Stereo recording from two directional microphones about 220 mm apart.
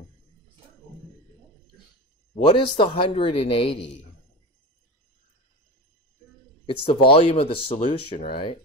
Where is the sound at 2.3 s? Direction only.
25° left (ahead or behind).